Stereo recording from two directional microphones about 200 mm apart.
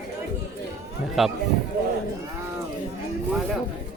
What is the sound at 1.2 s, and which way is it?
Speech, centre (ahead or behind).